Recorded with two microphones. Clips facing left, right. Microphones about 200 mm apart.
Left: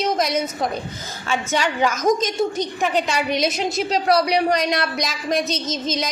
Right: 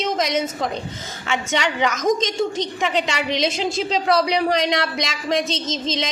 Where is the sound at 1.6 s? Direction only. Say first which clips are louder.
Left 1 dB; 80° right.